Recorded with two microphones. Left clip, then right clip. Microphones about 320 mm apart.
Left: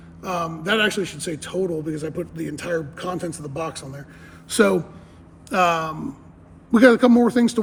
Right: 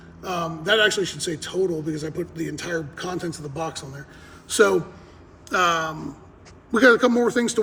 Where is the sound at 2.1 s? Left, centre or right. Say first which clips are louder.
Even; left.